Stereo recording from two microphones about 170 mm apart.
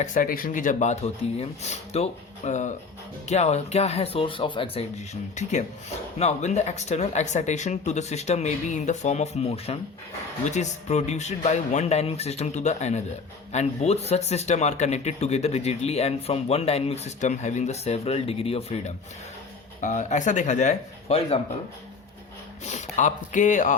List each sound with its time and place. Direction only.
0.0 s speech: 50° left (ahead or behind)
22.6 s speech: 45° left (ahead or behind)